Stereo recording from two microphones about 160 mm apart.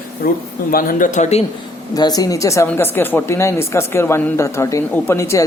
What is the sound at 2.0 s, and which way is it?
Speech, 25° left (ahead or behind).